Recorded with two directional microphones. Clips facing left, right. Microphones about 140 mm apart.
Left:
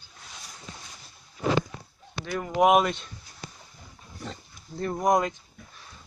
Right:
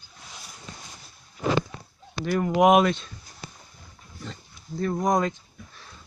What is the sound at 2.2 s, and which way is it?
Speech, 5° right (ahead or behind).